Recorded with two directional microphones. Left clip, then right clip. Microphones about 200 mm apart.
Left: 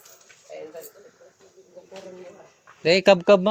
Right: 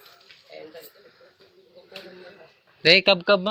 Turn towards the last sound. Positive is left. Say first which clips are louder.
# left 3 dB
turn(degrees=30)  # may be behind; listen again after turning